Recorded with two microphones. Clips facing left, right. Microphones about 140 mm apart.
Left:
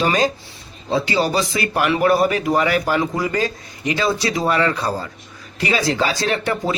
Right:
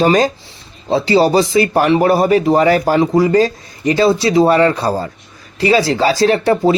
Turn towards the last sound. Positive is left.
turn(degrees=-30)  # may be behind; listen again after turning